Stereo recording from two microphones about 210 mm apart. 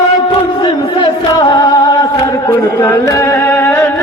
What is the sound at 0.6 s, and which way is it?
Music, 20° left (ahead or behind).